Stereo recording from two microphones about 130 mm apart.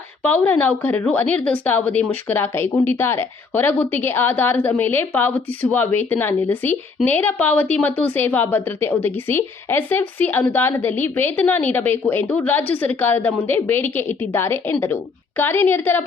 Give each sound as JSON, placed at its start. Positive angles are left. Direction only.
{"t": 0.2, "sound": "a woman's voice", "side_deg": 10}